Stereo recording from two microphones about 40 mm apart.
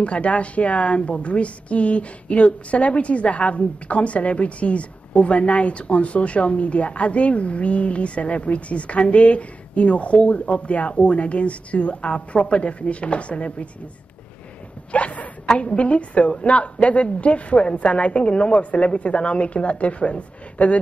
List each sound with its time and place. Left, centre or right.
0.0 s a woman's voice: left
14.9 s a sound: left
15.5 s a woman's voice: left